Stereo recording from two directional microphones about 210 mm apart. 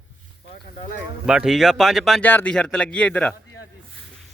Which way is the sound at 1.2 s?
5° right (ahead or behind).